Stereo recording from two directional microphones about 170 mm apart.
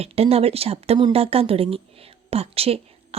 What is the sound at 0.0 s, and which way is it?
Speech, 35° right (ahead or behind).